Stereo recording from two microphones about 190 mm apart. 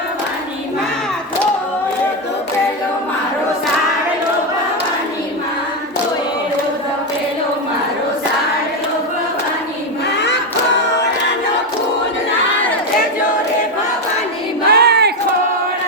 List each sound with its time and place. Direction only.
14.7 s battle cry: 55° right (ahead or behind)